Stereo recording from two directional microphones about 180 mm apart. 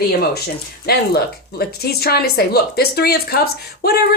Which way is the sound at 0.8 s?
60° left (ahead or behind).